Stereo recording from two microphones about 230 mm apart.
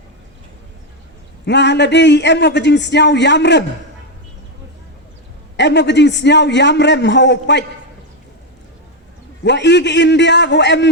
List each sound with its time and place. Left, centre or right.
1.5 s a man's voice: left
5.5 s a man's voice: left
9.4 s a man's voice: left